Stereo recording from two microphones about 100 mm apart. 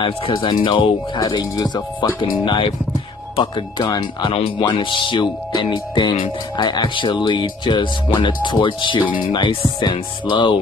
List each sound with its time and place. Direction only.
0.0 s speech: 55° left (ahead or behind)
1.2 s speech: 40° left (ahead or behind)